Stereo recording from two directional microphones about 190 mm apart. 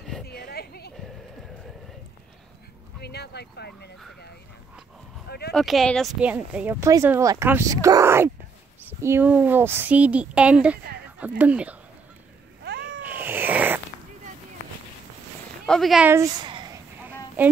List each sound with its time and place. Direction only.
0.5 s a sound: 55° left (ahead or behind)
3.0 s speech: 60° left (ahead or behind)
5.5 s speech: centre (ahead or behind)
12.6 s cat: 60° right (ahead or behind)
13.0 s cat: 10° right (ahead or behind)
15.6 s speech: centre (ahead or behind)
16.1 s a sound: 15° right (ahead or behind)
17.4 s speech: 10° right (ahead or behind)